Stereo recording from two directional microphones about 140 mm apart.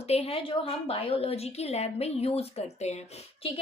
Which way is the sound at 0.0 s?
45° left (ahead or behind).